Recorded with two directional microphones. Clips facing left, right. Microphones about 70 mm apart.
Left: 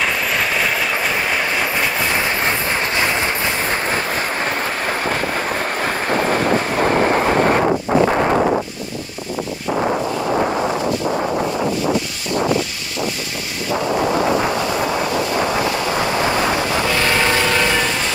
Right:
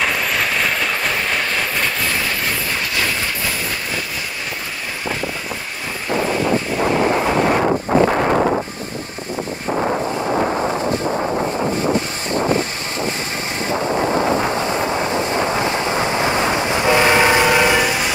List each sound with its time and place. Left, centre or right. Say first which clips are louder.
0.0 s train: even; centre
2.2 s train: left 3 dB; left
16.6 s train: right 3 dB; right